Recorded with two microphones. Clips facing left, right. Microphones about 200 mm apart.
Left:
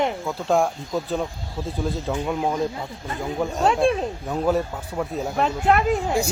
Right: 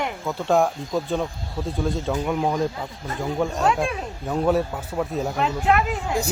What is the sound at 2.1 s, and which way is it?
Speech, 5° left (ahead or behind).